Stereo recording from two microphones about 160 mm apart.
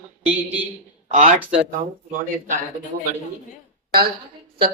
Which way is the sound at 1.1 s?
50° right (ahead or behind).